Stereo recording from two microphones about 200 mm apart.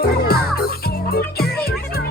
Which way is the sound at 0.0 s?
50° left (ahead or behind).